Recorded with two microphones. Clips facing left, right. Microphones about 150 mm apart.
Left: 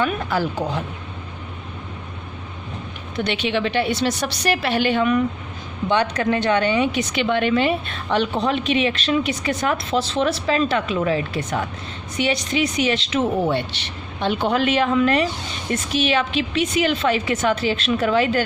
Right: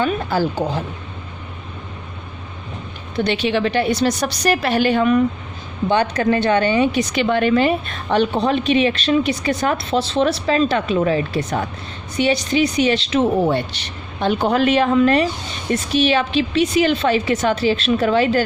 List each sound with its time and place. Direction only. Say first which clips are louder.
0.0 s a woman's voice: right 3 dB; 30° right (ahead or behind)
3.2 s a woman's voice: right 4 dB; 35° right (ahead or behind)